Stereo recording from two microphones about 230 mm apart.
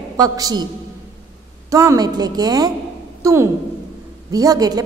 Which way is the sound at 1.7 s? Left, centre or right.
Centre.